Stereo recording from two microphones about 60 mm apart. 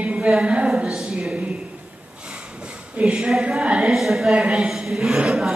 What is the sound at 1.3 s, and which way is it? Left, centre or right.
Speech, centre.